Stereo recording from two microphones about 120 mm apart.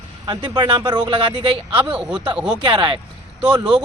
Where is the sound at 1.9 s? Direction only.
10° right (ahead or behind).